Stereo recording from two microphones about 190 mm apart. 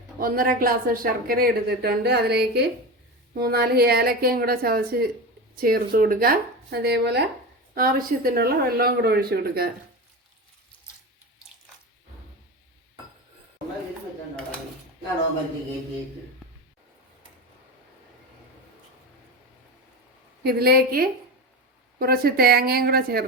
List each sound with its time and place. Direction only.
0.2 s a woman's voice: 50° right (ahead or behind)
7.8 s a woman's voice: 50° right (ahead or behind)
20.4 s a woman's voice: 55° right (ahead or behind)